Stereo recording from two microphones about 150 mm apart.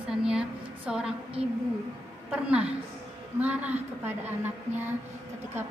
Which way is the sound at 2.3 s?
10° right (ahead or behind).